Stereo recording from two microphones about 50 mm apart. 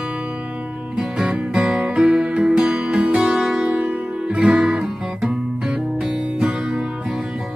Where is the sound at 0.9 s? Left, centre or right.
Centre.